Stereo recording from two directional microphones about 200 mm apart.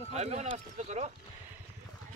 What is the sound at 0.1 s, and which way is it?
Speech, 35° right (ahead or behind).